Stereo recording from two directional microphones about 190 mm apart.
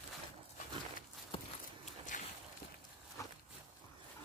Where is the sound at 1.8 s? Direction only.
40° left (ahead or behind).